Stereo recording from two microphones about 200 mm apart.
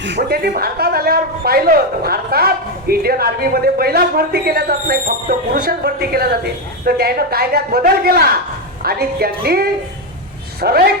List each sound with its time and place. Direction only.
0.3 s a man's voice: 50° right (ahead or behind)